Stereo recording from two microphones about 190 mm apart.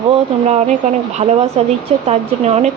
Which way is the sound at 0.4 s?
35° right (ahead or behind).